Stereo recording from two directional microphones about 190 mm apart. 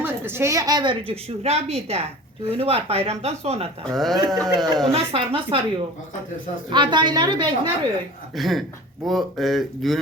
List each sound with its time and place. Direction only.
0.0 s a woman's voice: 10° right (ahead or behind); by 3.7 s 35° right (ahead or behind)
3.8 s speech: centre (ahead or behind)
4.9 s a woman's voice: 30° right (ahead or behind)
6.7 s a woman's voice: 25° right (ahead or behind)
8.4 s speech: centre (ahead or behind)